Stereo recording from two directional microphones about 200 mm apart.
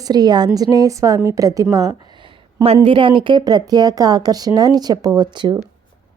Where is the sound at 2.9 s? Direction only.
25° right (ahead or behind).